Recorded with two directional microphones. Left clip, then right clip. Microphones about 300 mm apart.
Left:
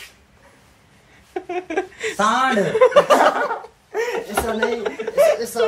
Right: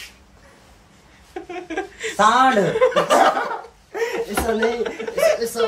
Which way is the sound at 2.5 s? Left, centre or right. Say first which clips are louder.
Left 1 dB; centre.